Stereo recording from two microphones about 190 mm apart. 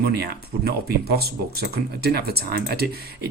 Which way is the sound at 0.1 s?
55° right (ahead or behind).